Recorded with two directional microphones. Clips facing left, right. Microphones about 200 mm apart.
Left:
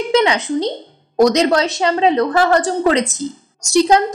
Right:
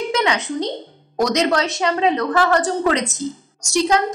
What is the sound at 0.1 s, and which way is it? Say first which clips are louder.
A woman's voice: left 9 dB; 30° left (ahead or behind).